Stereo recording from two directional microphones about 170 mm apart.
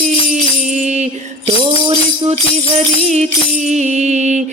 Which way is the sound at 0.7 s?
45° right (ahead or behind).